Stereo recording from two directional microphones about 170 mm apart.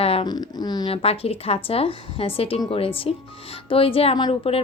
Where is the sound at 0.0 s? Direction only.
35° left (ahead or behind).